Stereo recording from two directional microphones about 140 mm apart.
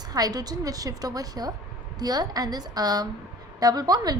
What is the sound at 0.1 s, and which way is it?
A woman's voice, 25° right (ahead or behind).